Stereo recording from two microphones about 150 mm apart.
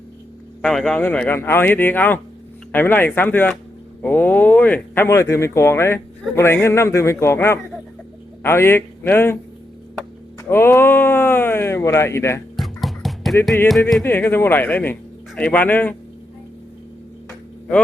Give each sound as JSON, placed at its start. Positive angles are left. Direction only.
{"t": 0.6, "sound": "speech", "side_deg": 5}
{"t": 10.5, "sound": "speech", "side_deg": 15}
{"t": 12.5, "sound": "music", "side_deg": 0}
{"t": 14.0, "sound": "speech", "side_deg": 15}